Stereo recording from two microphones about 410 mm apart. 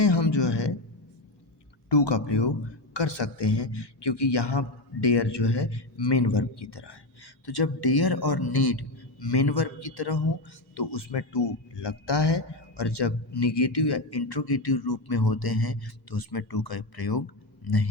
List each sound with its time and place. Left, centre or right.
0.0 s a sound: left
1.9 s a man's voice: left
7.4 s speech: left
10.8 s speech: left